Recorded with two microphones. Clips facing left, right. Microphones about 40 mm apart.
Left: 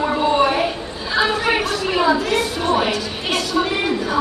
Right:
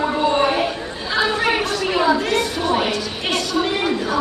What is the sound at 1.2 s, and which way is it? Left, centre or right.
Chatter, centre.